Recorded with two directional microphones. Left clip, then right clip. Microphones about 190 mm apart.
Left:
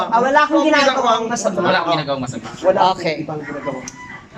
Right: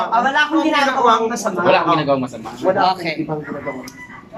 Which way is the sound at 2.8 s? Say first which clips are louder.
Left 1 dB; 35° left (ahead or behind).